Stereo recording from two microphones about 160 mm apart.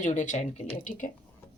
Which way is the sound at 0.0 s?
50° left (ahead or behind).